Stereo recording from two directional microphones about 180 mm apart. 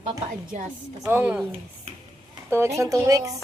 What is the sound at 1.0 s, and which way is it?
Speech, 10° right (ahead or behind).